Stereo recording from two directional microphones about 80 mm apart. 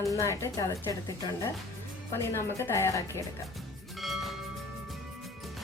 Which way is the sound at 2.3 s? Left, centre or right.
Left.